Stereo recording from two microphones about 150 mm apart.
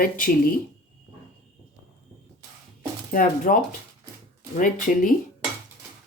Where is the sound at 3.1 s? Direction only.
65° left (ahead or behind).